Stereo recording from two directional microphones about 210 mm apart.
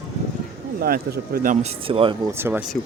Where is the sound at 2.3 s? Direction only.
10° right (ahead or behind).